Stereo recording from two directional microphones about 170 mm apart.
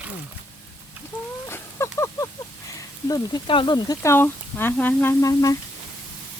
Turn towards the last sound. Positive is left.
turn(degrees=20)  # may be behind; listen again after turning